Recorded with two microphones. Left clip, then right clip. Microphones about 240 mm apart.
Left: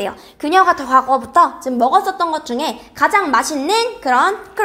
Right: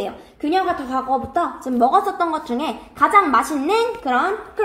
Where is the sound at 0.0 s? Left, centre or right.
Left.